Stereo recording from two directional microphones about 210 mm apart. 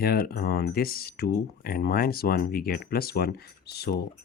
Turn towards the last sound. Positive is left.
turn(degrees=50)  # may be behind; listen again after turning